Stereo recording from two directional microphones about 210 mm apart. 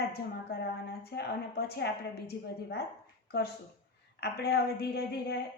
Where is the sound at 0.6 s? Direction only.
50° left (ahead or behind).